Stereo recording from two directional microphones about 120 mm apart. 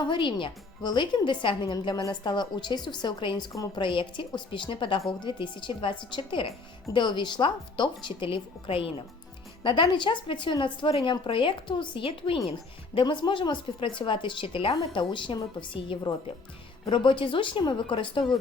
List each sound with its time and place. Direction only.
0.0 s speech: 40° left (ahead or behind)
3.8 s speech: 45° left (ahead or behind)